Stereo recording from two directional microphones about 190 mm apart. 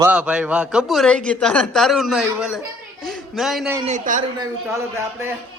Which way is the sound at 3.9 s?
40° right (ahead or behind).